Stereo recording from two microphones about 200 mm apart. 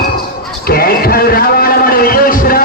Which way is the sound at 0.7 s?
50° left (ahead or behind).